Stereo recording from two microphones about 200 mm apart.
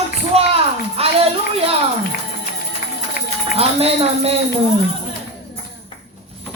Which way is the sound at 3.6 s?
30° right (ahead or behind).